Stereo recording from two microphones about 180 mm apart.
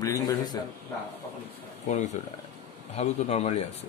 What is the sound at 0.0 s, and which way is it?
Speech, 20° left (ahead or behind).